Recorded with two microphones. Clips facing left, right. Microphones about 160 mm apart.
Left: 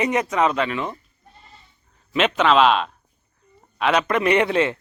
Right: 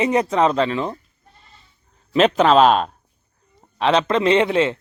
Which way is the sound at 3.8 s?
30° right (ahead or behind).